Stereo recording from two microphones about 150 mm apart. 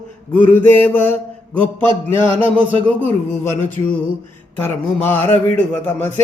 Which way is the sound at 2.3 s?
35° right (ahead or behind).